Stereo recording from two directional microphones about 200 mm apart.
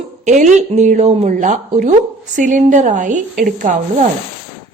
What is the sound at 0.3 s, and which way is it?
Speech, 35° right (ahead or behind).